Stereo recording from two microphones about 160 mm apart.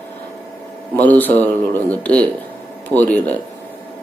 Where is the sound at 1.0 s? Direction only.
10° left (ahead or behind).